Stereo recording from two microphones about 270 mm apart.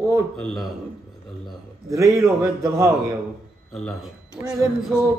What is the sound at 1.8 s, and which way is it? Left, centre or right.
Speech, centre.